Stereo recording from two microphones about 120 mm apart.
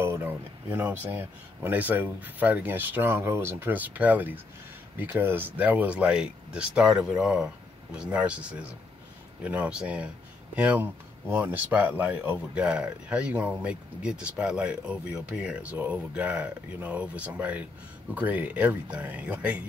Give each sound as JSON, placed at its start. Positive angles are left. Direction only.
{"t": 0.0, "sound": "speech", "side_deg": -20}